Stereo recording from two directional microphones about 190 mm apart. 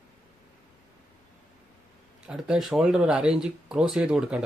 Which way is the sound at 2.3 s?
5° right (ahead or behind).